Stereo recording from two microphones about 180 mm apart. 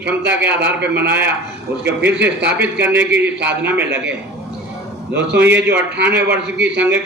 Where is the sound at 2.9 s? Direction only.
70° right (ahead or behind).